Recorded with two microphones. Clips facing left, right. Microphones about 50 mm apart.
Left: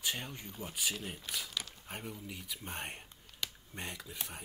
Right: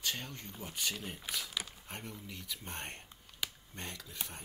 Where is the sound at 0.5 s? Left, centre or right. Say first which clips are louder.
Left 1 dB; centre.